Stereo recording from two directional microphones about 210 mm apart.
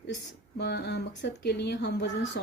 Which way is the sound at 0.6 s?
50° left (ahead or behind).